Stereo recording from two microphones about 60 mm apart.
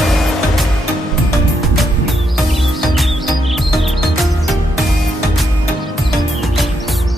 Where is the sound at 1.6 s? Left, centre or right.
Centre.